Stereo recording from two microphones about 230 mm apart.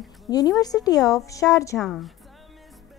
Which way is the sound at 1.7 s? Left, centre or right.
Centre.